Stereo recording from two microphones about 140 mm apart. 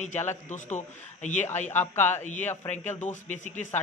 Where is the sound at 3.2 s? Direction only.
60° left (ahead or behind).